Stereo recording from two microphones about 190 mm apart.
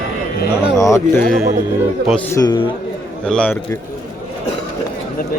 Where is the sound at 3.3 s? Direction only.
5° left (ahead or behind).